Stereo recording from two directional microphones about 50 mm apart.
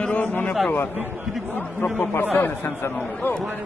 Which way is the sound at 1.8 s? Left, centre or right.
Left.